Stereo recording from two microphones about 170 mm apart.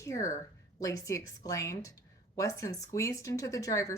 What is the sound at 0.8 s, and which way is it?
Speech, 20° left (ahead or behind).